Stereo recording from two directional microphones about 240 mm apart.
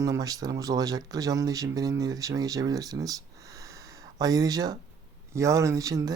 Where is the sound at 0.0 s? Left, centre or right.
Centre.